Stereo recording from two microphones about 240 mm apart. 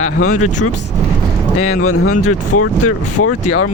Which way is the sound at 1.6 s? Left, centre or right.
Left.